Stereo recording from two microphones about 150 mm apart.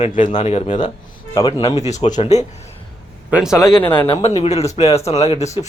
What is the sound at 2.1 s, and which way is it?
Speech, 50° left (ahead or behind).